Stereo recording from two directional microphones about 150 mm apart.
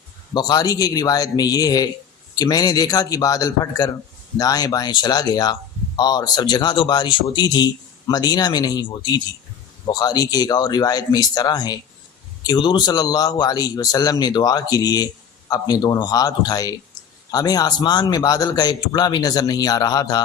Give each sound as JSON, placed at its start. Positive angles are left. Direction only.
{"t": 0.3, "sound": "speech", "side_deg": 25}